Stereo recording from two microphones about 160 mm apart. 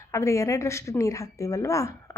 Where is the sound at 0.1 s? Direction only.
20° left (ahead or behind).